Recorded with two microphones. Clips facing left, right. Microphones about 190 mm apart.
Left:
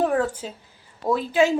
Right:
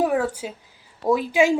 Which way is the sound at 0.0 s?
10° right (ahead or behind).